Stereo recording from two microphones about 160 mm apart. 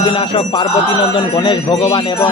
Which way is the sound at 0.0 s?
35° left (ahead or behind).